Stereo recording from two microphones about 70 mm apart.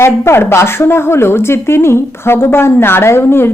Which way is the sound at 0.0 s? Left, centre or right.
Left.